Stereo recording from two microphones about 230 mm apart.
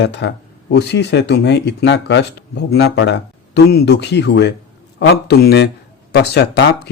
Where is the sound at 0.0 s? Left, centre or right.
Left.